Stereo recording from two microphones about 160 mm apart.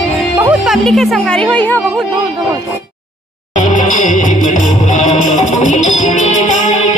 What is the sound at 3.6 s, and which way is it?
Music, 50° left (ahead or behind).